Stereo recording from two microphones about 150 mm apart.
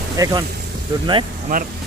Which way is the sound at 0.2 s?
25° right (ahead or behind).